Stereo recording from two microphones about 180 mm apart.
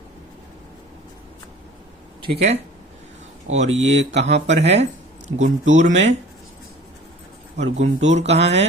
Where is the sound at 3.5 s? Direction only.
40° right (ahead or behind).